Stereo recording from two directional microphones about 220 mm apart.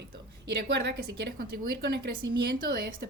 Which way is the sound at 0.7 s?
50° right (ahead or behind).